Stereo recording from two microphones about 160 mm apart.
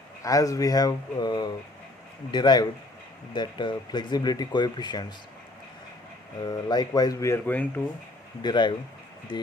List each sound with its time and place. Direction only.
0.2 s speech: 20° left (ahead or behind)
6.4 s speech: 25° left (ahead or behind)
8.4 s speech: 30° left (ahead or behind)